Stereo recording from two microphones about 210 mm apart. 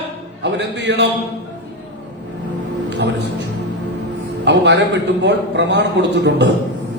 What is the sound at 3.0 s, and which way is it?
Music, 55° right (ahead or behind).